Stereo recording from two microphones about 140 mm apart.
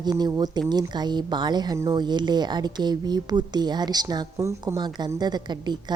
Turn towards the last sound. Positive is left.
turn(degrees=-30)  # may be behind; listen again after turning